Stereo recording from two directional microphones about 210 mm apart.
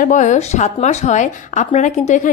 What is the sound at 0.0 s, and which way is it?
A woman's voice, 35° left (ahead or behind).